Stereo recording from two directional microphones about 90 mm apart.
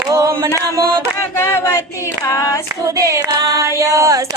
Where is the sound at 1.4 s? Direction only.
25° left (ahead or behind).